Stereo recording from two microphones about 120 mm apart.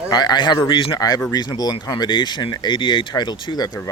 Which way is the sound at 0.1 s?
35° left (ahead or behind).